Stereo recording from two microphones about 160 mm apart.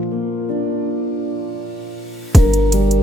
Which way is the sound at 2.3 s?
Centre (ahead or behind).